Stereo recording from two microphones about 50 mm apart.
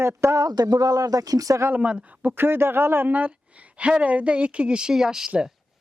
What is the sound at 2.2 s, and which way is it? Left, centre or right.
Speech, right.